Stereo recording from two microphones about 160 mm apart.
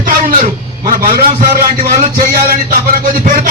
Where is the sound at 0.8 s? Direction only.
60° right (ahead or behind).